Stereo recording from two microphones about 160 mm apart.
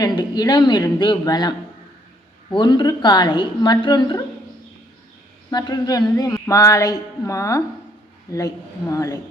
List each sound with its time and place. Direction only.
0.0 s a woman's voice: 25° left (ahead or behind)
5.5 s a woman's voice: 25° left (ahead or behind)